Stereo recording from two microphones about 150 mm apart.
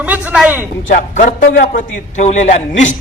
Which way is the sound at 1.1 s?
55° left (ahead or behind).